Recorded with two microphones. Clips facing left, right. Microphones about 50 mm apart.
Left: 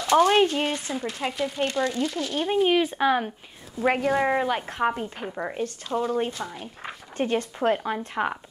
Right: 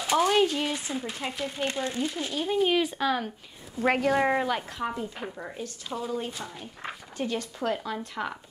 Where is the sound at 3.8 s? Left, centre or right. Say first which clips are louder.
Left 1 dB; centre.